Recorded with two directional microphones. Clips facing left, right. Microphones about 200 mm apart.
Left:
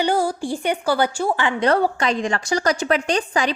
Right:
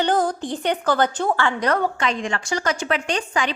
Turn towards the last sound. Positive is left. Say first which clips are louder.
# left 3 dB
turn(degrees=35)  # may be behind; listen again after turning